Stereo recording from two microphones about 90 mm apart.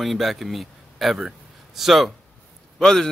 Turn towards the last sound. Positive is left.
turn(degrees=5)  # may be behind; listen again after turning